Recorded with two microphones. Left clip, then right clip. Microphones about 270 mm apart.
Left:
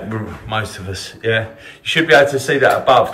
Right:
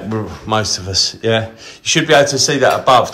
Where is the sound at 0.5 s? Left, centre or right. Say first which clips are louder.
Right 6 dB; centre.